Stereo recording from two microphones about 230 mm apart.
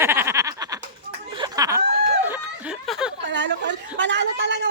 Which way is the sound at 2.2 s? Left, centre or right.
Centre.